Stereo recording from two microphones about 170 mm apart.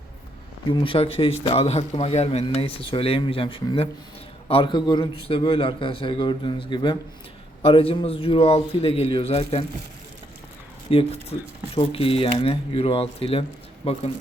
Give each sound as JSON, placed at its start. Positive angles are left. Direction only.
{"t": 0.7, "sound": "a man's voice", "side_deg": 35}
{"t": 10.9, "sound": "speech", "side_deg": 35}